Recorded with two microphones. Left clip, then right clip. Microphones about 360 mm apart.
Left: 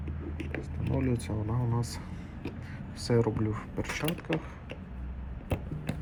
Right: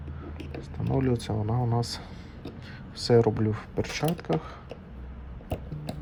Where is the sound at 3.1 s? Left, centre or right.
Right.